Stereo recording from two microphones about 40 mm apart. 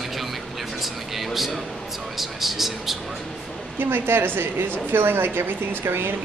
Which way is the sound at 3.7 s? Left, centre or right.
Right.